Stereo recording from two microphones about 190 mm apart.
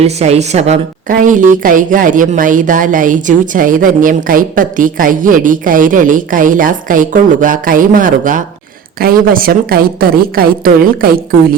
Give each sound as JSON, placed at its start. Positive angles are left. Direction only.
{"t": 0.0, "sound": "a woman's voice", "side_deg": -35}